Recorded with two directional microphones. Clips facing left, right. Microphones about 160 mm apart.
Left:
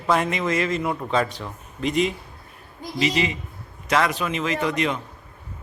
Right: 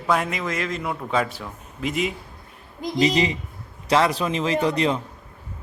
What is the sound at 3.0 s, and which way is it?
Speech, 35° right (ahead or behind).